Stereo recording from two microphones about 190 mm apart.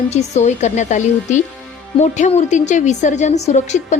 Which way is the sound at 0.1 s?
35° left (ahead or behind).